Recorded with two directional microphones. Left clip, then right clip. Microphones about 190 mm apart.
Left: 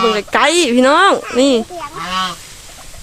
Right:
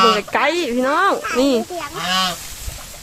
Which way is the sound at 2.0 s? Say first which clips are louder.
Even; 55° right (ahead or behind).